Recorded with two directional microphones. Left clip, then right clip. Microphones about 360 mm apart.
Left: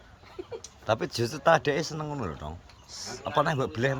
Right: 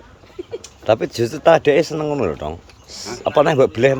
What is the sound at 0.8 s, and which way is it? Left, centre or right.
A man's voice, centre.